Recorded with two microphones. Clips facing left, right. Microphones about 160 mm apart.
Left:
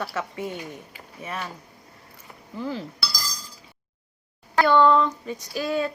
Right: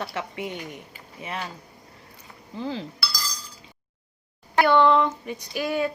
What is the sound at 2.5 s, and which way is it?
Speech, 25° right (ahead or behind).